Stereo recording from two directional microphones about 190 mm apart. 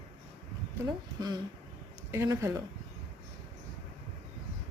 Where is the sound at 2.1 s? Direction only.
15° right (ahead or behind).